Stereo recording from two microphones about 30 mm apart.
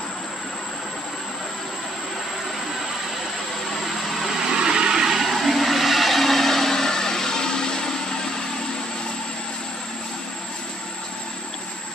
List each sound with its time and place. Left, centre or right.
3.8 s vehicle: centre
4.4 s vehicle: right
5.2 s a sound: centre; by 8.3 s left